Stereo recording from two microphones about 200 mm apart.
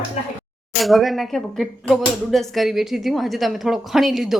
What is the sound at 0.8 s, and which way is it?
Speech, centre (ahead or behind).